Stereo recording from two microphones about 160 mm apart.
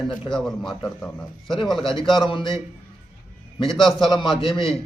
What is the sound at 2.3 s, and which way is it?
Speech, 30° left (ahead or behind).